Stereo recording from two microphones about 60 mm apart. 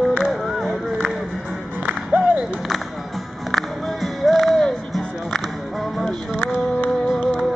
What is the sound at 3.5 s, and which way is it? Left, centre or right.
Music, centre.